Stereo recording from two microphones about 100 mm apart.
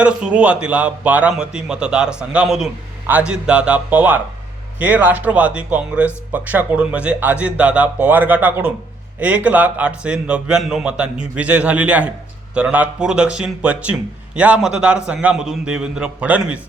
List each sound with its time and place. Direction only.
0.0 s a man's voice: 10° right (ahead or behind)